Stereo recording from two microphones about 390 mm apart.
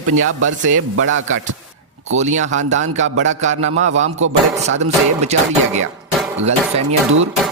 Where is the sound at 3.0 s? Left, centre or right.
Right.